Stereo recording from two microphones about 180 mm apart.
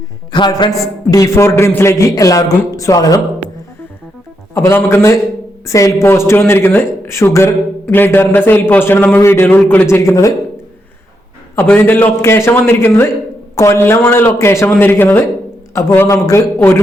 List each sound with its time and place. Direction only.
0.3 s a woman's voice: 25° left (ahead or behind)
4.5 s speech: 15° left (ahead or behind)
11.5 s speech: 10° left (ahead or behind)